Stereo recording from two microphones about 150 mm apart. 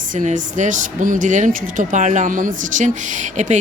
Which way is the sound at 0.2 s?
55° right (ahead or behind).